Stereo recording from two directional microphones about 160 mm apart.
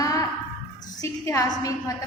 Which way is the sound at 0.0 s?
20° left (ahead or behind).